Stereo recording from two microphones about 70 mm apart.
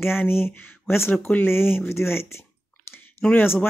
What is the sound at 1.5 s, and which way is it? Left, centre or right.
Speech, left.